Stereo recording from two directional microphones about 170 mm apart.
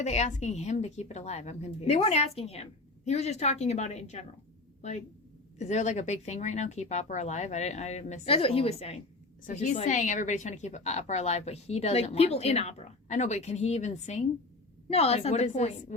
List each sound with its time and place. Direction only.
0.0 s a woman's voice: 40° left (ahead or behind)